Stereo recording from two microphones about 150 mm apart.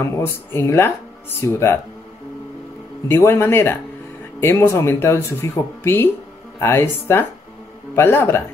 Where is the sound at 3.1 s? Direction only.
15° left (ahead or behind).